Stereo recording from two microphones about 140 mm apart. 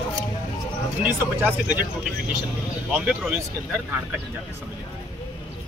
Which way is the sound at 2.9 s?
10° right (ahead or behind).